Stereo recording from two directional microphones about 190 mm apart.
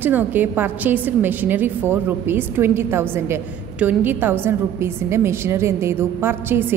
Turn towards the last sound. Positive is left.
turn(degrees=-10)  # may be behind; listen again after turning